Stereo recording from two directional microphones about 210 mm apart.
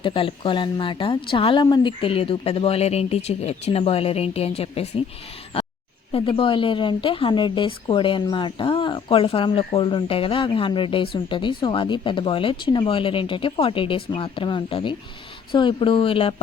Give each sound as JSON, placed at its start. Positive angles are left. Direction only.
{"t": 0.0, "sound": "speech", "side_deg": 25}
{"t": 6.1, "sound": "speech", "side_deg": 25}